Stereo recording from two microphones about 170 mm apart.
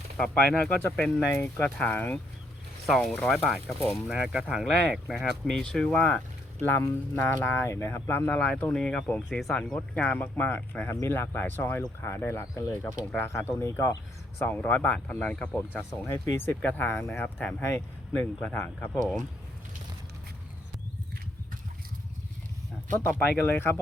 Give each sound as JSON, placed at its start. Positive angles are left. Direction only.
{"t": 0.2, "sound": "speech", "side_deg": 5}
{"t": 23.0, "sound": "speech", "side_deg": 10}